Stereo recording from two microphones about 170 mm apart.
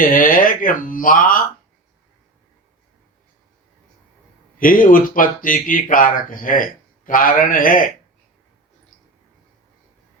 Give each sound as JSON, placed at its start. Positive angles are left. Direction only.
{"t": 0.0, "sound": "speech", "side_deg": 55}
{"t": 4.6, "sound": "speech", "side_deg": 55}